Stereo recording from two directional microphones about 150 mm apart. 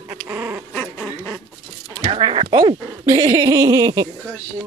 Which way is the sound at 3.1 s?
25° right (ahead or behind).